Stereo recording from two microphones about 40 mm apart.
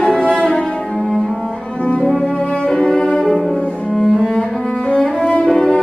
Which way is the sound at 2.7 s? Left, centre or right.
Centre.